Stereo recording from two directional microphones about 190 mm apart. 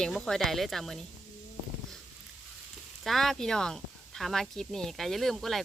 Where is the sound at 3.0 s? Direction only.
Centre (ahead or behind).